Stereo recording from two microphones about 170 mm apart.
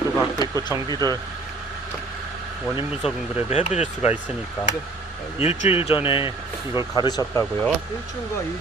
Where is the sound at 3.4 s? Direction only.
35° left (ahead or behind).